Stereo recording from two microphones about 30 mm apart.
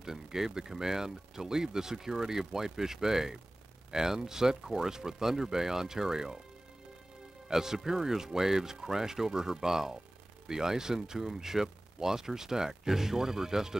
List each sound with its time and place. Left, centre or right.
0.0 s speech: centre
7.4 s speech: centre